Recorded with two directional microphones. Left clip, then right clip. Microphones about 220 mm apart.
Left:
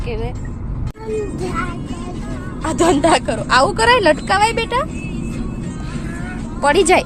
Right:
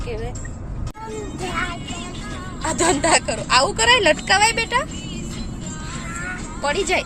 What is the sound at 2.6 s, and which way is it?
Speech, centre (ahead or behind).